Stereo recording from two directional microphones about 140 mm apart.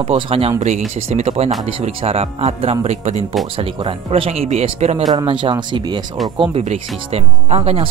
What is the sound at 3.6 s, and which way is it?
Speech, 40° right (ahead or behind).